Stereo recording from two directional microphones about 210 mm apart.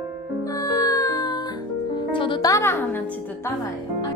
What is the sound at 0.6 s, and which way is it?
Music, 15° left (ahead or behind).